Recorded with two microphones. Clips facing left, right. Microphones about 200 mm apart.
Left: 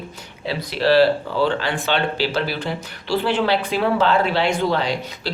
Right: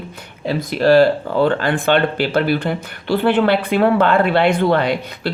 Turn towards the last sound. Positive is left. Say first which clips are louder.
# right 5 dB
turn(degrees=-55)  # may be behind; listen again after turning